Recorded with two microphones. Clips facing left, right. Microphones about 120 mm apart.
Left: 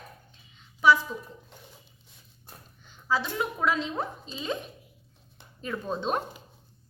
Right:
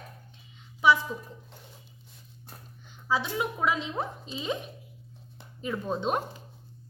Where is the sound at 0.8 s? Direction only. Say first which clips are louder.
Left 1 dB; 20° right (ahead or behind).